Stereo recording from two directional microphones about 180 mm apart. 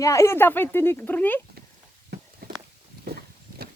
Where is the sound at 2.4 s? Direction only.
60° right (ahead or behind).